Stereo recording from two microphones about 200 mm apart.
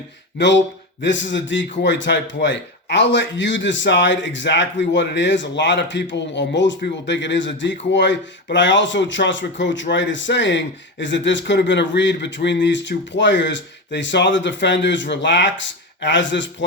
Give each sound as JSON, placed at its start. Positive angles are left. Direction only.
{"t": 0.3, "sound": "a man's voice", "side_deg": 60}